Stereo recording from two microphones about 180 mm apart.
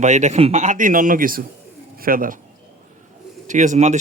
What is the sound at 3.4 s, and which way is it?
Speech, 45° right (ahead or behind).